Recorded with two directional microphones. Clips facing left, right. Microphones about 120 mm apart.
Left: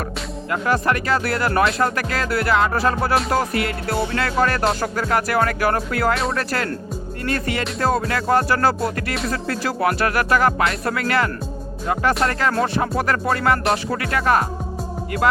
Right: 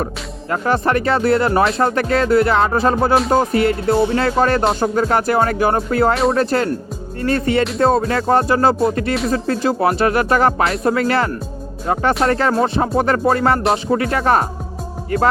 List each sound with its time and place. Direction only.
0.5 s speech: 30° right (ahead or behind)